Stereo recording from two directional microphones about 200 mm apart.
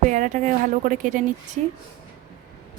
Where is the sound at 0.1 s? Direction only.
40° right (ahead or behind).